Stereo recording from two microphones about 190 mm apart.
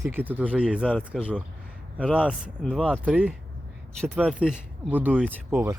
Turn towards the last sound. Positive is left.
turn(degrees=-10)  # may be behind; listen again after turning